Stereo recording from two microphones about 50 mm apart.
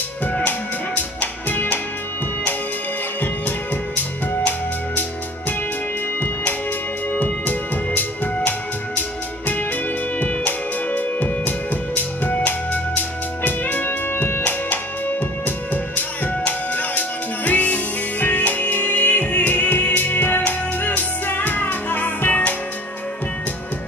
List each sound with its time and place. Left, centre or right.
0.3 s music: left
3.2 s music: left
7.1 s music: left
10.2 s music: left